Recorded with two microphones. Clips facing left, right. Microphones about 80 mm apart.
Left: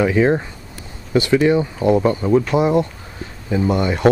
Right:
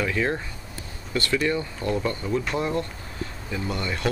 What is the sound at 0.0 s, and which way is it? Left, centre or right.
Speech, left.